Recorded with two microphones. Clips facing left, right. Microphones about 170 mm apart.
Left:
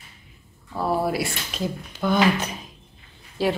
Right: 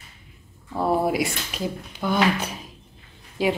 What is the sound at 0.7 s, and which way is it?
Speech, 20° right (ahead or behind).